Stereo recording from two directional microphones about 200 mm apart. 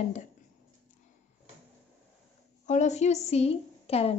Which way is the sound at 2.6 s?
35° left (ahead or behind).